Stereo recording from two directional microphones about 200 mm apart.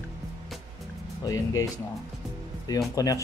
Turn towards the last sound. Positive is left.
turn(degrees=15)  # may be behind; listen again after turning